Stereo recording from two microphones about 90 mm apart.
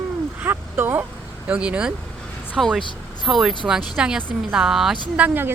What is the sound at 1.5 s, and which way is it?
Speech, 15° right (ahead or behind).